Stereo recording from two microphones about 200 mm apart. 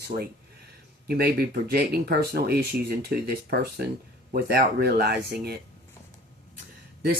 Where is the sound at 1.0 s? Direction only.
50° right (ahead or behind).